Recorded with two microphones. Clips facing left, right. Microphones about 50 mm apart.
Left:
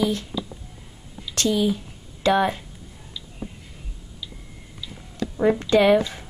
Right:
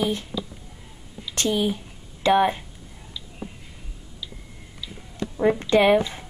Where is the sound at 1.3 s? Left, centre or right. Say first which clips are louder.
Left 2 dB; right.